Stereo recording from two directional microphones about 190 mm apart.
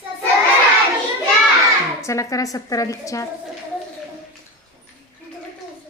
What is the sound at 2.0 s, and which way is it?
A woman's voice, 15° left (ahead or behind).